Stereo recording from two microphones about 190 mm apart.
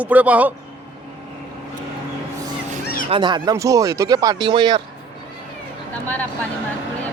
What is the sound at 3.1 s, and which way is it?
Speech, 25° right (ahead or behind).